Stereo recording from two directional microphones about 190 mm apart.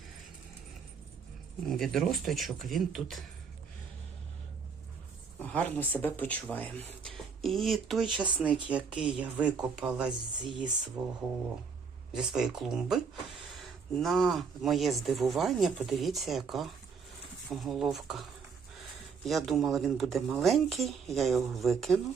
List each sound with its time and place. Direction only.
1.6 s speech: centre (ahead or behind)
5.4 s speech: 10° left (ahead or behind)
8.4 s speech: 25° right (ahead or behind)
8.7 s speech: 5° right (ahead or behind)